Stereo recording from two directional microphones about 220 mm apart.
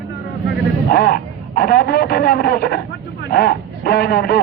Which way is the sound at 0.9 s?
45° left (ahead or behind).